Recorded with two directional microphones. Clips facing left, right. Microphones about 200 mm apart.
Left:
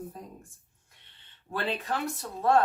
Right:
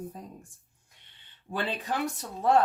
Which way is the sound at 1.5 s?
20° right (ahead or behind).